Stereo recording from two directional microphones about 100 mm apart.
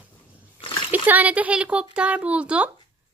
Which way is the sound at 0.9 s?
15° right (ahead or behind).